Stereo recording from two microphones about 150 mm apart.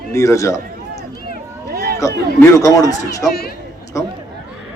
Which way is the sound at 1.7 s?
80° right.